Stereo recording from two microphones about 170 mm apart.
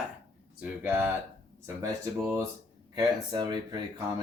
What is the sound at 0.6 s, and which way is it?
Speech, 10° right (ahead or behind).